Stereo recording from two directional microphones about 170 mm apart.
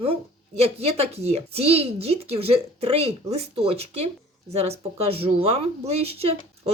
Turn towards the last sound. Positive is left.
turn(degrees=-35)  # may be behind; listen again after turning